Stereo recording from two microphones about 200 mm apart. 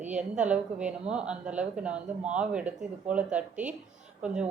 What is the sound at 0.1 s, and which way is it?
A woman's voice, 5° right (ahead or behind).